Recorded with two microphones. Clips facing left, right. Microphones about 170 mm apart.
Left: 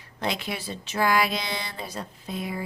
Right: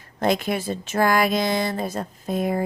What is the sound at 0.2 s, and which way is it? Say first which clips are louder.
Speech: right 8 dB; 45° right (ahead or behind).